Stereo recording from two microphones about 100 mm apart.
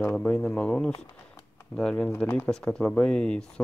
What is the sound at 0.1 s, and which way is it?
Speech, 10° left (ahead or behind).